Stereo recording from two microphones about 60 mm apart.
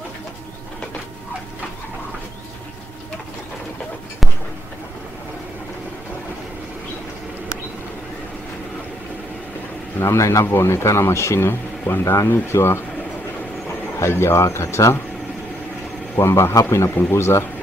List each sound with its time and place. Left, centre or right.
9.9 s speech: left
12.3 s speech: left
13.9 s speech: left
16.2 s speech: left